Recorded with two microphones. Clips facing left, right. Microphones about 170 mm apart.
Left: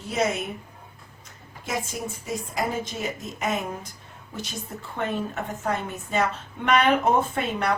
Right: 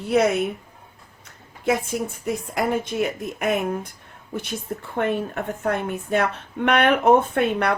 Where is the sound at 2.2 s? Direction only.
60° right (ahead or behind).